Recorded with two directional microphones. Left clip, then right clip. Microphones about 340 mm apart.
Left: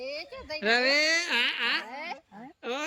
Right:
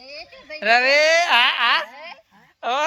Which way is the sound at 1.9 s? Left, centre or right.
Centre.